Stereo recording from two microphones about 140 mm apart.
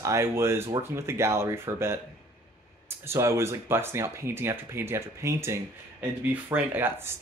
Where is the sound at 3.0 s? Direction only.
20° right (ahead or behind).